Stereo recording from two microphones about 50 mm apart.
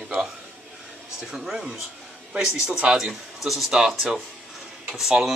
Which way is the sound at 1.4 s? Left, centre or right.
Centre.